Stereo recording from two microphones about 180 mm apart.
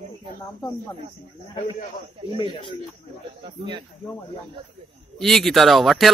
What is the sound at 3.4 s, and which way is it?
Speech, 25° right (ahead or behind).